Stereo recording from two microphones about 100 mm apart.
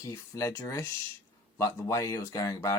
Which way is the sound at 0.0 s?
35° left (ahead or behind).